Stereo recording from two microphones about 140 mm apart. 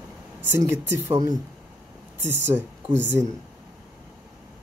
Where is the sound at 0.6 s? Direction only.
15° right (ahead or behind).